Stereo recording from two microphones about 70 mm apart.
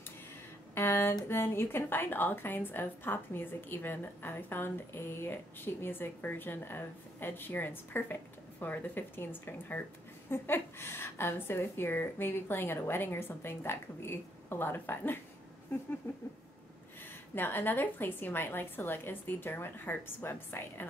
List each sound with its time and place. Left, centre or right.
0.7 s a woman's voice: left
17.4 s a woman's voice: left